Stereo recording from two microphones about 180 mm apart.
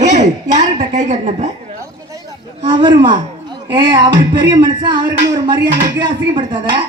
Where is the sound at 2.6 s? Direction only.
25° right (ahead or behind).